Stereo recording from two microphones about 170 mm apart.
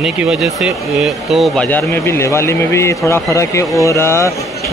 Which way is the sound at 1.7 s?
10° left (ahead or behind).